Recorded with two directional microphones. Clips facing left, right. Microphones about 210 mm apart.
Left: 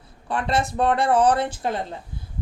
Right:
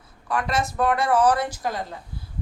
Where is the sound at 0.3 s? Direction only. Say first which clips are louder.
Left 1 dB; 30° left (ahead or behind).